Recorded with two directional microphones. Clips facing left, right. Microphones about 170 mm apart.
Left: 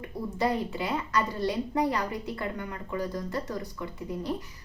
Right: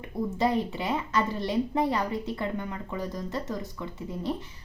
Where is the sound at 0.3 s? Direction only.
25° right (ahead or behind).